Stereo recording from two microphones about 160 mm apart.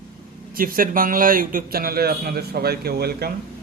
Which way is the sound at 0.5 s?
65° right (ahead or behind).